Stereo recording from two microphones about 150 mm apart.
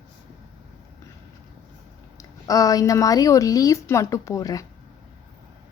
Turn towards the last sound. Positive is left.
turn(degrees=20)  # may be behind; listen again after turning